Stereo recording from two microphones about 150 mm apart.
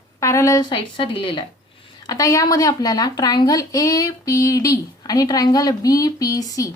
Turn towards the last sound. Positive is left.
turn(degrees=25)  # may be behind; listen again after turning